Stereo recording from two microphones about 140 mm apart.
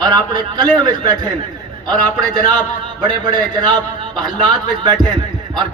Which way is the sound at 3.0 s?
30° right (ahead or behind).